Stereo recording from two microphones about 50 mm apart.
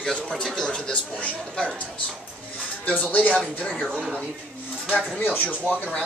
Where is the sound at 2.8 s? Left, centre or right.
Left.